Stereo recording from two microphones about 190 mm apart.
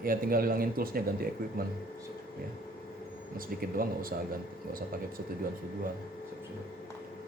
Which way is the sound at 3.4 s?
50° right (ahead or behind).